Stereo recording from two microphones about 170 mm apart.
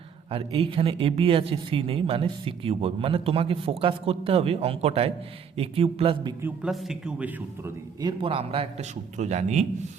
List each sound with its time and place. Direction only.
0.3 s speech: 35° right (ahead or behind)
6.4 s a man's voice: 5° right (ahead or behind)
8.0 s speech: 30° right (ahead or behind)